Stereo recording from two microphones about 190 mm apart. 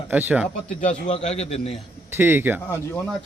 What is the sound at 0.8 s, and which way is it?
Speech, 40° left (ahead or behind).